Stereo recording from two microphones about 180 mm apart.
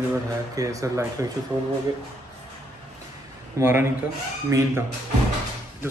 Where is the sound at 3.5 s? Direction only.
15° right (ahead or behind).